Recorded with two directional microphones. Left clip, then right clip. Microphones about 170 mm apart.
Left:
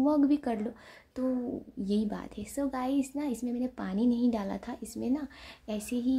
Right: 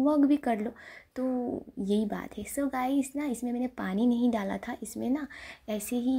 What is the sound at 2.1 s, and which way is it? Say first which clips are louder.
Speech: right 3 dB; 15° right (ahead or behind).